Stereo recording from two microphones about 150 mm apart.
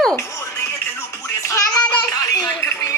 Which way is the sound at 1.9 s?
25° left (ahead or behind).